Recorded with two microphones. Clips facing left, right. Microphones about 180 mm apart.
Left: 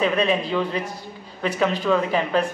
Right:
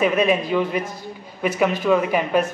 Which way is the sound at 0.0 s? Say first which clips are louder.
Right 2 dB; 10° right (ahead or behind).